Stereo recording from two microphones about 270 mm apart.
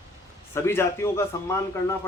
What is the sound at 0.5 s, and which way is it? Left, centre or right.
A man's voice, centre.